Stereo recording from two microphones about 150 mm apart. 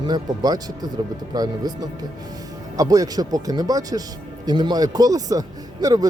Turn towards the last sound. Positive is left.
turn(degrees=-25)  # may be behind; listen again after turning